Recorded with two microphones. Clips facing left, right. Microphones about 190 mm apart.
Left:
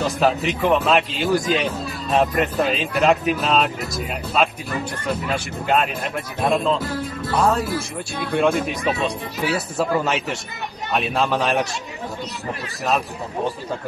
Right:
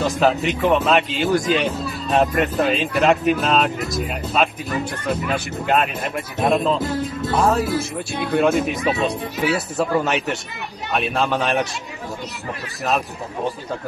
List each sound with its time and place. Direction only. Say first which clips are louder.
0.0 s a man's voice: right 1 dB; centre (ahead or behind)
6.8 s speech: right 3 dB; 25° right (ahead or behind)
7.3 s a man's voice: right 1 dB; centre (ahead or behind)